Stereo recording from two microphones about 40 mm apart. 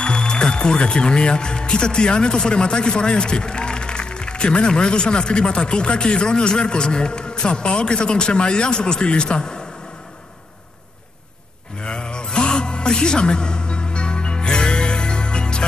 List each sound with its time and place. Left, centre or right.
0.0 s speech: left
11.8 s music: left